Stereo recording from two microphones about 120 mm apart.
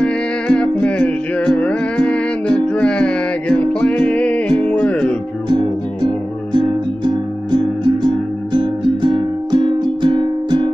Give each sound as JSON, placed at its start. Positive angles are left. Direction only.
{"t": 0.0, "sound": "music", "side_deg": 10}
{"t": 8.5, "sound": "music", "side_deg": -40}